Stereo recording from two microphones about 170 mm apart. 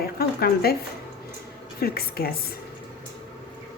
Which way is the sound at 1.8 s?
65° left (ahead or behind).